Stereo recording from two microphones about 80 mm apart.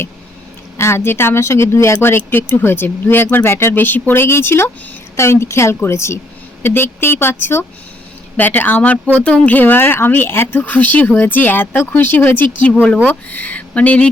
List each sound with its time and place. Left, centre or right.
0.8 s speech: left